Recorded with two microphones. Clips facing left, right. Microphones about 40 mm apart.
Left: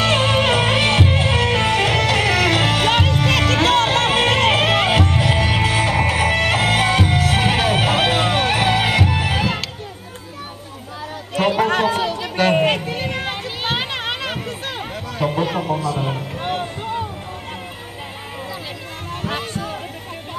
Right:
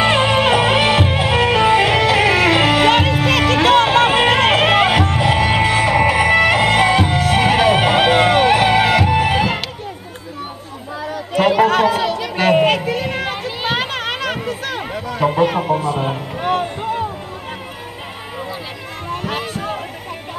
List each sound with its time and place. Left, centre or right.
0.0 s music: centre
2.6 s music: centre
5.5 s music: right
8.6 s music: right
9.1 s music: right
11.6 s run: centre
12.0 s a sound: right
12.4 s a sound: centre
15.1 s music: right
15.8 s a sound: right
19.0 s music: right